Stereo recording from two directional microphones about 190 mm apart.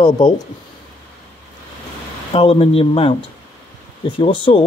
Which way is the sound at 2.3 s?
30° left (ahead or behind).